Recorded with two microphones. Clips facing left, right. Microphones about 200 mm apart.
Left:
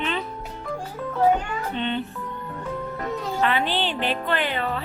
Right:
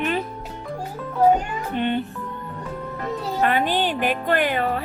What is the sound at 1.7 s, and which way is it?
Speech, 55° right (ahead or behind).